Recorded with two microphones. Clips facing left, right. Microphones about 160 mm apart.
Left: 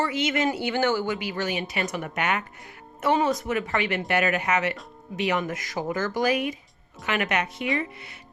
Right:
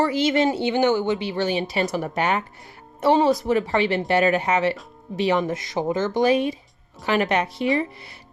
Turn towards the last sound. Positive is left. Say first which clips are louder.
# right 5 dB
turn(degrees=-35)  # may be behind; listen again after turning